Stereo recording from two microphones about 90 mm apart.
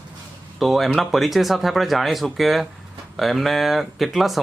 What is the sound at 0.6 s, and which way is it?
Speech, centre (ahead or behind).